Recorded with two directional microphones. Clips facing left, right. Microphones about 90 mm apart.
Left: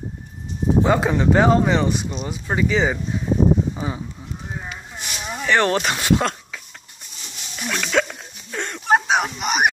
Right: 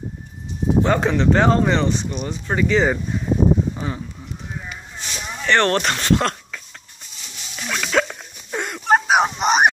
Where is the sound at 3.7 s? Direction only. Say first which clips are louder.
Even; 15° left (ahead or behind).